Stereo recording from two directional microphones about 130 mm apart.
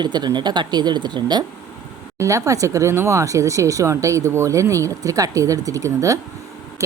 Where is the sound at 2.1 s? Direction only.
25° right (ahead or behind).